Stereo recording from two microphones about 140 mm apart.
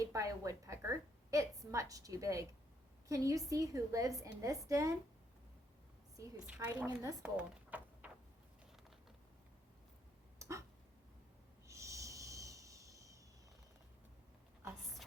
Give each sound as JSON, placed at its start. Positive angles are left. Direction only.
{"t": 0.0, "sound": "a woman's voice", "side_deg": -25}
{"t": 6.4, "sound": "a woman's voice", "side_deg": -10}
{"t": 7.2, "sound": "drawer open or close", "side_deg": -10}
{"t": 10.3, "sound": "a sound", "side_deg": -20}
{"t": 11.7, "sound": "snort", "side_deg": -20}